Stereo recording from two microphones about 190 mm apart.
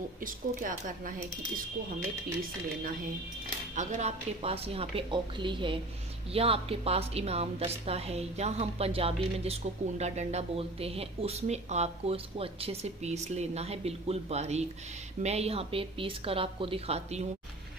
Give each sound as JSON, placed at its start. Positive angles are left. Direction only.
{"t": 0.2, "sound": "speech", "side_deg": -45}
{"t": 3.7, "sound": "a woman's voice", "side_deg": -40}